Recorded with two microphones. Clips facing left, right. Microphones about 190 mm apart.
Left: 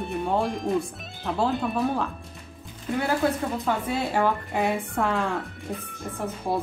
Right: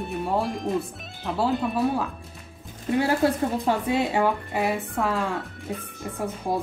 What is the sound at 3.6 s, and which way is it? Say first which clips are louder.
Speech: right 3 dB; 20° right (ahead or behind).